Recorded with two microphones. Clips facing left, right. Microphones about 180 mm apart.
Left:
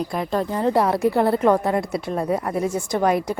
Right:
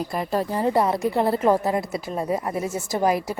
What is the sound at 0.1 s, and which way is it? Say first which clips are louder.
A woman's voice: left 1 dB; 5° right (ahead or behind).